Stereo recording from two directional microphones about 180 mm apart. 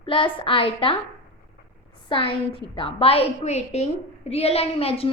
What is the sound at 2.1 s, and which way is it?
A woman's voice, 30° left (ahead or behind).